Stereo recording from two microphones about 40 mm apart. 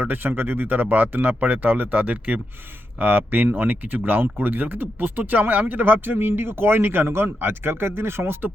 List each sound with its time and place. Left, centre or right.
0.0 s speech: right